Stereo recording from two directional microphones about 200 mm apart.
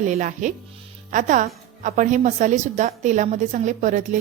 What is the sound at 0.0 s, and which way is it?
A woman's voice, 40° right (ahead or behind).